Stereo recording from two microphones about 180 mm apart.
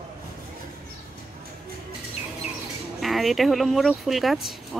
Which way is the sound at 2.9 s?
Centre (ahead or behind).